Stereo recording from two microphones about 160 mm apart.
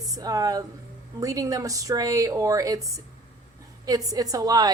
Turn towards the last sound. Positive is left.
turn(degrees=-25)  # may be behind; listen again after turning